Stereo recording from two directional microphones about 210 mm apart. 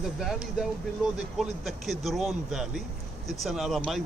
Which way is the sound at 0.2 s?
Centre (ahead or behind).